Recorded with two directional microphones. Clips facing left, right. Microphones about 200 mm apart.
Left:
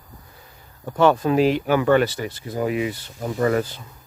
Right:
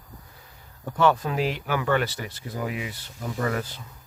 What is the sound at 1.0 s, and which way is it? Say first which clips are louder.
Speech: left 6 dB; 25° left (ahead or behind).